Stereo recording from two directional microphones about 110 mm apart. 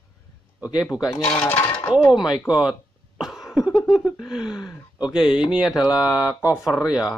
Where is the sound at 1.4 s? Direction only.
20° left (ahead or behind).